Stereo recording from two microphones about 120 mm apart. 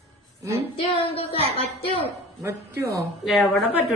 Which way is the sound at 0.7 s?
50° left (ahead or behind).